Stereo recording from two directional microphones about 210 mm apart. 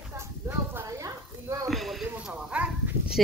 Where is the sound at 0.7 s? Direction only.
15° right (ahead or behind).